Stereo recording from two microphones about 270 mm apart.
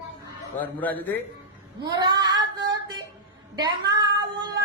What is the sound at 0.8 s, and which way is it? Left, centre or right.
Speech, centre.